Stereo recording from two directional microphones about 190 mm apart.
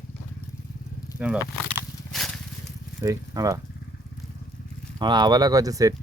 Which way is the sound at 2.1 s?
Centre (ahead or behind).